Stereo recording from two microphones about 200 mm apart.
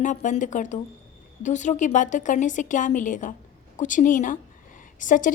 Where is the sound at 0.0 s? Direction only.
40° left (ahead or behind).